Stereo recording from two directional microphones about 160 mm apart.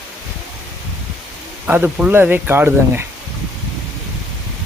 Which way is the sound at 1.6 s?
10° right (ahead or behind).